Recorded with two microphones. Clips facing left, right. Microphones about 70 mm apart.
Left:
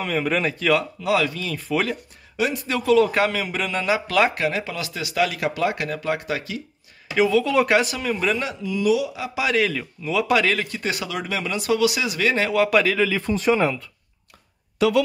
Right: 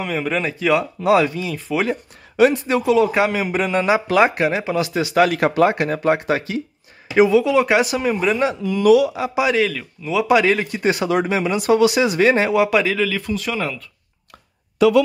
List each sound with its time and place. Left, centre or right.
0.0 s speech: centre
1.0 s speech: right
1.4 s a man's voice: centre
2.5 s speech: right
2.8 s a man's voice: centre
3.3 s speech: right
5.1 s speech: right
7.2 s speech: centre
7.5 s a man's voice: centre
7.8 s speech: centre
8.6 s speech: right
9.5 s speech: centre; by 12.5 s right
12.6 s speech: centre
13.2 s speech: left